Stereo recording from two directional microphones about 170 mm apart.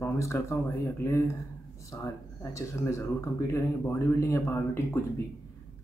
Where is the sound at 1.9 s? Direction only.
20° left (ahead or behind).